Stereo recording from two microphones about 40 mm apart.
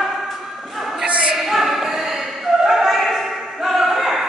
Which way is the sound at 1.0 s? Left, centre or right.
Right.